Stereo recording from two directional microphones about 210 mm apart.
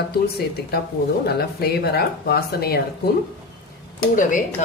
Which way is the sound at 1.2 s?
50° left (ahead or behind).